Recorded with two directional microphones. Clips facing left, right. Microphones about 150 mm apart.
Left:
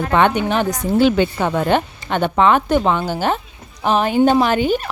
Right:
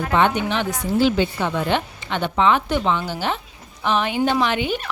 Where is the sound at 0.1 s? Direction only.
55° left (ahead or behind).